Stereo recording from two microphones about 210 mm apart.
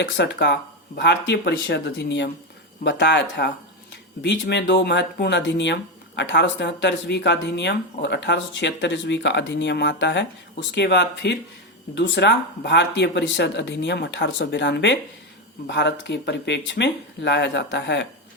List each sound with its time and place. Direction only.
0.0 s speech: 55° left (ahead or behind)